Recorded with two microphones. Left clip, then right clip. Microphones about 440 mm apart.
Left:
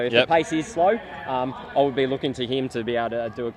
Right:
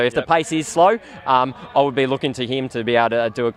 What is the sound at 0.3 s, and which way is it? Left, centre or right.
Speech, right.